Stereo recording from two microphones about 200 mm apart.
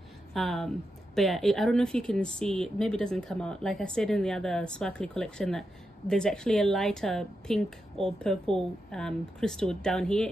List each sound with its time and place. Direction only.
0.3 s a woman's voice: centre (ahead or behind)